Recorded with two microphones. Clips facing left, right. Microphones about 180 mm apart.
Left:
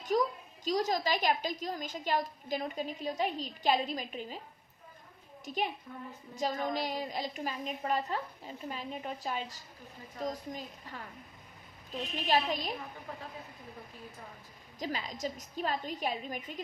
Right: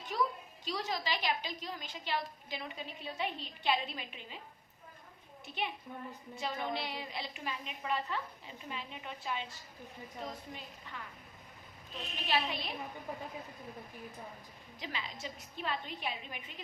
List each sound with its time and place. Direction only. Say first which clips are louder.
0.1 s a sound: left 5 dB; 40° left (ahead or behind)
0.6 s a woman's voice: left 7 dB; 40° left (ahead or behind)
5.5 s a woman's voice: left 8 dB; 40° left (ahead or behind)
5.9 s a woman's voice: even; 20° right (ahead or behind)
6.3 s a woman's voice: left 5 dB; 40° left (ahead or behind)
12.3 s a woman's voice: left 4 dB; 40° left (ahead or behind)
14.8 s a woman's voice: left 7 dB; 40° left (ahead or behind)